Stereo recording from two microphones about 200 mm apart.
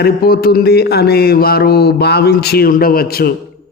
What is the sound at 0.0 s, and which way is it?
Speech, 50° left (ahead or behind).